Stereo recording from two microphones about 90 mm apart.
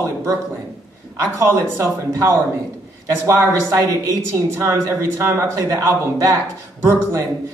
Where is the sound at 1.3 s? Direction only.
30° right (ahead or behind).